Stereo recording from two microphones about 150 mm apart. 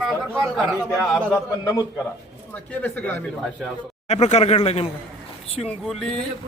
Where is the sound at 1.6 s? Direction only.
20° left (ahead or behind).